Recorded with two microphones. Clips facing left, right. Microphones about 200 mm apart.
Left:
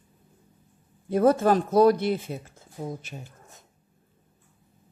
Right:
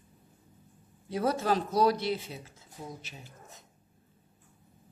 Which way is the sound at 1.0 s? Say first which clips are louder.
Left 9 dB; 50° left (ahead or behind).